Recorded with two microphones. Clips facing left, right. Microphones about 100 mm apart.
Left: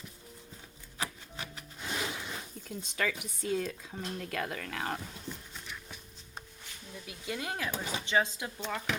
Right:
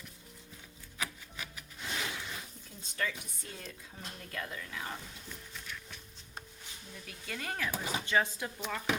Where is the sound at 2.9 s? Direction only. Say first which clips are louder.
Left 3 dB; 90° left; by 5.0 s 65° left (ahead or behind).